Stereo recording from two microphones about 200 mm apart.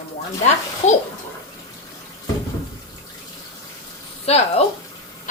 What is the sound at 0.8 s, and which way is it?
Speech, 35° left (ahead or behind).